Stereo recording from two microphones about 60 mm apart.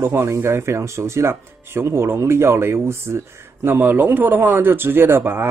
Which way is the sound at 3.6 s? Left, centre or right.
Right.